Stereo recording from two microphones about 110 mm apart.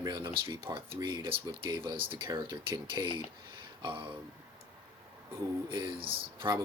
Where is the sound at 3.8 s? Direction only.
45° right (ahead or behind).